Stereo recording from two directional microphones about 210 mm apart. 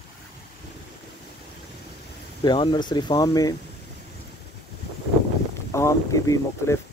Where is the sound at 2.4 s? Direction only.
20° left (ahead or behind).